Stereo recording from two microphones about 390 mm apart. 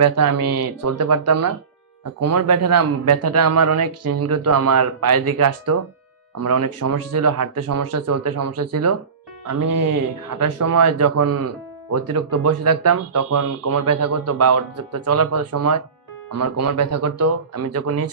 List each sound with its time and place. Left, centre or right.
0.0 s speech: right